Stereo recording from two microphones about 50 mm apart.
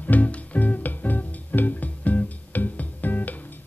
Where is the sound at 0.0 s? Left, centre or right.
Left.